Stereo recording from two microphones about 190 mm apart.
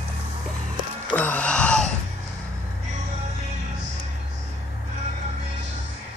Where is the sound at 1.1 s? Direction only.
10° left (ahead or behind).